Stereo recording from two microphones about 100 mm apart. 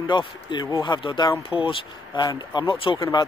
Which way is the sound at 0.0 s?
55° left (ahead or behind).